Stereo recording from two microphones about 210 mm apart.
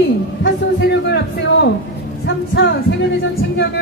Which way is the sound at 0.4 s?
55° left (ahead or behind).